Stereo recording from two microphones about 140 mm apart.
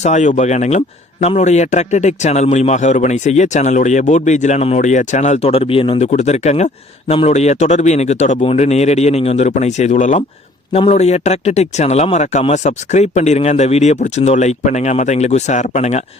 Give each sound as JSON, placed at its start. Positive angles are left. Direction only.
{"t": 0.0, "sound": "speech", "side_deg": 55}
{"t": 6.1, "sound": "speech", "side_deg": 50}